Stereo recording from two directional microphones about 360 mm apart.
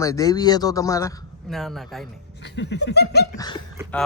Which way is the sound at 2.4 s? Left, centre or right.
Left.